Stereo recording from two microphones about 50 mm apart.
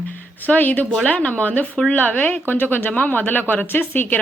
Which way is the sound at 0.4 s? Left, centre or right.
Left.